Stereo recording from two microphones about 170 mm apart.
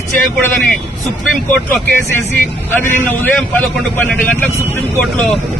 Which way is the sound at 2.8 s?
15° left (ahead or behind).